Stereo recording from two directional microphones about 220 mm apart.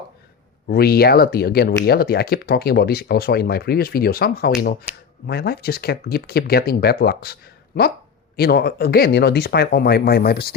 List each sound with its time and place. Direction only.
0.7 s speech: 45° left (ahead or behind)